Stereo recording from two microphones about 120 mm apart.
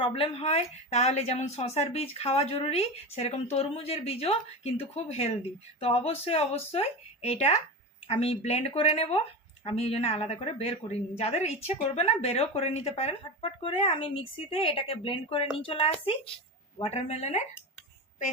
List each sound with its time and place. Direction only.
0.0 s speech: 50° left (ahead or behind)
16.8 s speech: 60° left (ahead or behind)